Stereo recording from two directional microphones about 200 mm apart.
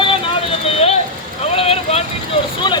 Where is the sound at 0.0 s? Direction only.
25° left (ahead or behind).